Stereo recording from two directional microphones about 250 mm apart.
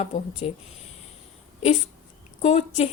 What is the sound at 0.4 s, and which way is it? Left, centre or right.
Speech, left.